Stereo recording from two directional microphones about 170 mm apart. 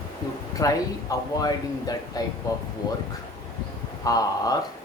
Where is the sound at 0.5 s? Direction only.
20° left (ahead or behind).